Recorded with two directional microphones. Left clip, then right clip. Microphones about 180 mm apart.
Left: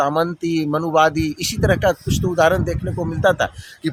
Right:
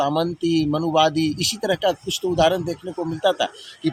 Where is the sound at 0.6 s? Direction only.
10° left (ahead or behind).